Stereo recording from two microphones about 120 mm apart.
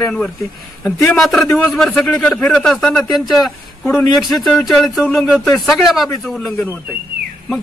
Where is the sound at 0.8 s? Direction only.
20° left (ahead or behind).